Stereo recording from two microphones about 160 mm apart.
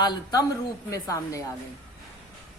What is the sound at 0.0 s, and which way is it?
Speech, 25° left (ahead or behind).